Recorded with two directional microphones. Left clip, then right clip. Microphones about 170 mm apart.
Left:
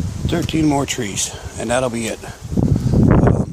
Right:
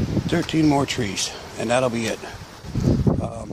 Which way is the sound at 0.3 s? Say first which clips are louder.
Left 2 dB; 20° left (ahead or behind).